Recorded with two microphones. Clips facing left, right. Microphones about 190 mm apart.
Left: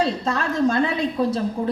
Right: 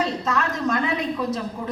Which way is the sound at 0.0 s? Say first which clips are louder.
Left 2 dB; 30° left (ahead or behind).